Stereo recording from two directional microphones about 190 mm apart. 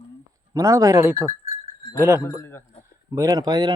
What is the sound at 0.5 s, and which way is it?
Speech, 15° right (ahead or behind).